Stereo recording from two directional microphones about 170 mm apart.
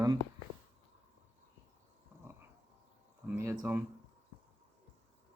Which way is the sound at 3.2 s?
15° right (ahead or behind).